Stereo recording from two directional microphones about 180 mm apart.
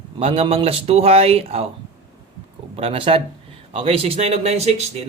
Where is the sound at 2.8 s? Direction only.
30° right (ahead or behind).